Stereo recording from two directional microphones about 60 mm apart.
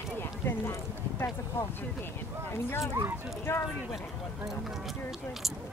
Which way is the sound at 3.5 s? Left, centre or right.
Left.